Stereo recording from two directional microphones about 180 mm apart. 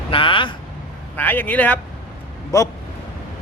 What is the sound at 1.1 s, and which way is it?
A man's voice, 10° left (ahead or behind).